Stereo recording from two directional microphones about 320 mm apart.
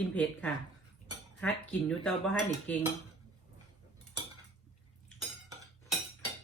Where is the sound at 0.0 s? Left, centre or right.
Centre.